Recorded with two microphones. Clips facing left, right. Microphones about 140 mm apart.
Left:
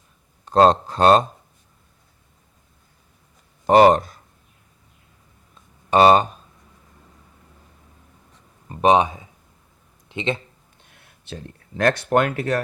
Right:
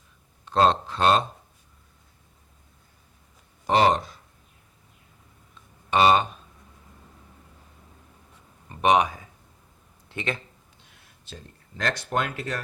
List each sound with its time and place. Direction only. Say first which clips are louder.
0.4 s speech: left 6 dB; 40° left (ahead or behind)
3.7 s speech: left 7 dB; 50° left (ahead or behind)
5.9 s speech: left 5 dB; 40° left (ahead or behind)
8.7 s speech: left 4 dB; 30° left (ahead or behind)
10.8 s speech: left 9 dB; 60° left (ahead or behind)